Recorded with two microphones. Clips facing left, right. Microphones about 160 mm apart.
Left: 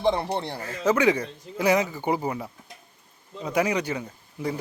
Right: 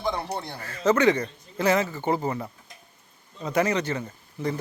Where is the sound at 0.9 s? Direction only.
10° left (ahead or behind).